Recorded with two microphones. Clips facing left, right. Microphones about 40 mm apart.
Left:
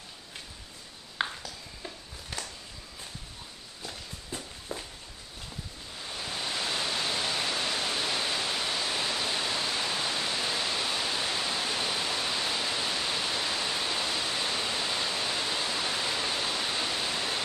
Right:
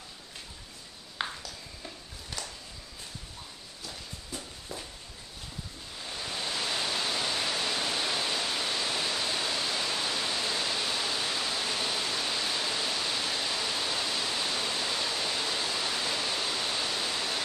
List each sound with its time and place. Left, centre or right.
1.2 s a sound: centre
3.8 s walk: centre
6.0 s pink noise: centre